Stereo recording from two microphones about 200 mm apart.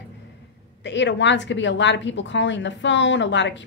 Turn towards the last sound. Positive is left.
turn(degrees=65)  # may be behind; listen again after turning